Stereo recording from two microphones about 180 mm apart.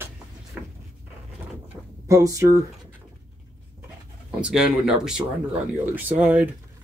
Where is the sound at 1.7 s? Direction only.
Centre (ahead or behind).